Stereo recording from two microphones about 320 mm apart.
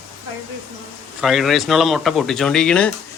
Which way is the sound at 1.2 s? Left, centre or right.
Centre.